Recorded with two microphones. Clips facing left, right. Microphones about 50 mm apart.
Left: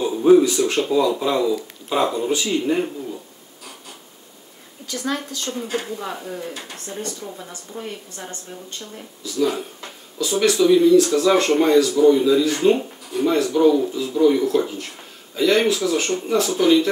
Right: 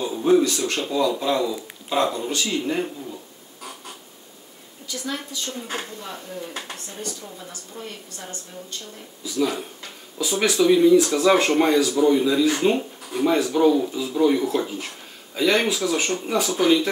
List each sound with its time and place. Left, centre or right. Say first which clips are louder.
0.0 s a sound: left 5 dB; centre
0.7 s a woman's voice: left 4 dB; centre
5.0 s a woman's voice: left 5 dB; left
7.3 s a woman's voice: left 3 dB; centre
10.1 s speech: left 3 dB; centre